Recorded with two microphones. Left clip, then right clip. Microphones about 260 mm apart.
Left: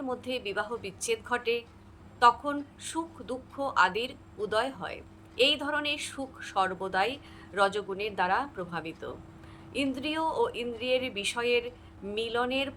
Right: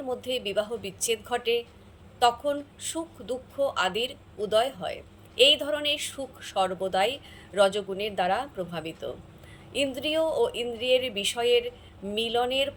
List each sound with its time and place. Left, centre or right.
0.1 s a woman's voice: centre